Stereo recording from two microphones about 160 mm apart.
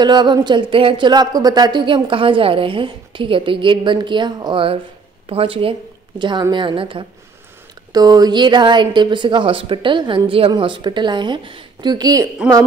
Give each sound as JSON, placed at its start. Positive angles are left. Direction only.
{"t": 0.0, "sound": "a woman's voice", "side_deg": -25}